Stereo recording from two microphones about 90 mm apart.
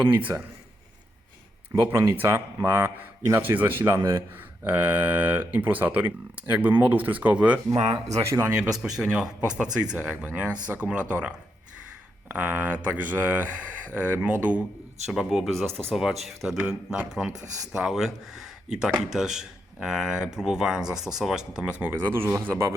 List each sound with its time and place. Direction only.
1.7 s speech: 25° right (ahead or behind)
7.7 s speech: 50° right (ahead or behind)
7.9 s speech: 30° right (ahead or behind)
8.7 s speech: 5° right (ahead or behind)
15.0 s speech: 5° right (ahead or behind)
15.5 s speech: 5° left (ahead or behind)
16.6 s speech: 15° right (ahead or behind)